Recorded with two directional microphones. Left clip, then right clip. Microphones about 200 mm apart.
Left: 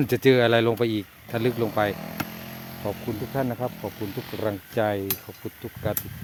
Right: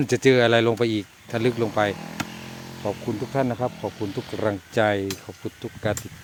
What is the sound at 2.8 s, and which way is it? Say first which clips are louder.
Speech: right 3 dB; 15° right (ahead or behind).